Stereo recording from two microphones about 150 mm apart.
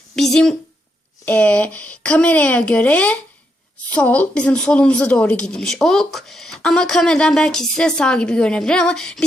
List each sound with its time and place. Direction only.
0.2 s a woman's voice: centre (ahead or behind)